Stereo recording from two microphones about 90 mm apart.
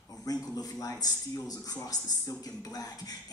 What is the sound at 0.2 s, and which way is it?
A man's voice, 45° left (ahead or behind).